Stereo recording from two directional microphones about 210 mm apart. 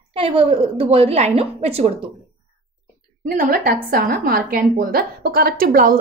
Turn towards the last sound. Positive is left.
turn(degrees=-45)  # may be behind; listen again after turning